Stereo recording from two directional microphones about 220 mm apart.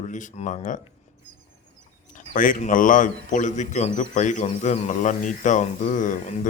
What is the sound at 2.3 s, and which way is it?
A man's voice, 40° left (ahead or behind).